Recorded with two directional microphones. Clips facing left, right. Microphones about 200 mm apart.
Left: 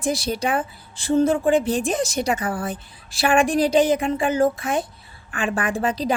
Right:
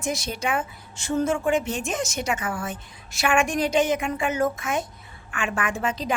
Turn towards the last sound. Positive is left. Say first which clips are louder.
# left 4 dB
turn(degrees=35)  # may be behind; listen again after turning